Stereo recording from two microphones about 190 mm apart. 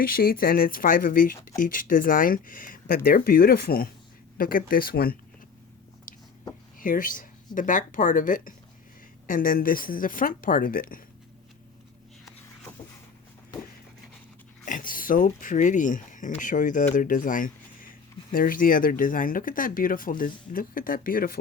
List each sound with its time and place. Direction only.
0.1 s speech: 50° left (ahead or behind)
6.1 s a sound: 45° left (ahead or behind)
6.7 s speech: 45° left (ahead or behind)
14.6 s speech: 45° left (ahead or behind)